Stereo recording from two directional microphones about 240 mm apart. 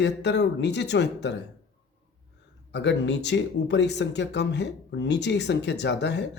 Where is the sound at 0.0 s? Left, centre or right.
Left.